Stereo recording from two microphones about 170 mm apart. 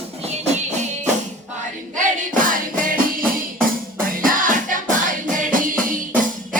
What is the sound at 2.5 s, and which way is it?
Music, 55° right (ahead or behind).